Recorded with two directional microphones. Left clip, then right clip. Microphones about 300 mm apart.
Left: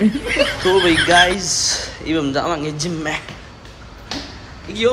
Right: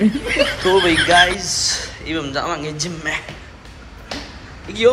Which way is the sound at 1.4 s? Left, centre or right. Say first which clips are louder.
Left 1 dB; centre.